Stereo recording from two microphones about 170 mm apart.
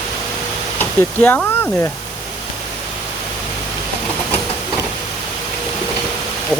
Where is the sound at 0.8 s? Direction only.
10° left (ahead or behind).